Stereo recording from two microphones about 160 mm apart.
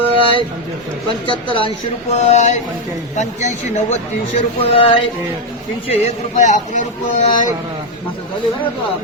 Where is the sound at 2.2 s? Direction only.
45° left (ahead or behind).